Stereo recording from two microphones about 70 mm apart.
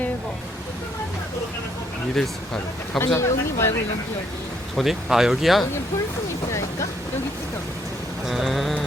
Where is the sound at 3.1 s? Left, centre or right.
Left.